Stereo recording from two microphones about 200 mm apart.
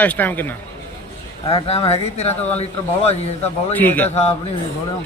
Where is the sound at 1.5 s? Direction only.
30° left (ahead or behind).